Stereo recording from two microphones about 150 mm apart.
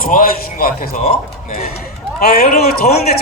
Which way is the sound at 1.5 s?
85° left.